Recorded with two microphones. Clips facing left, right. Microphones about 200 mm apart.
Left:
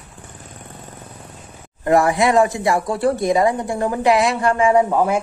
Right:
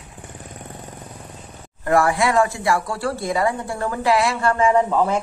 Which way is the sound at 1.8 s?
20° left (ahead or behind).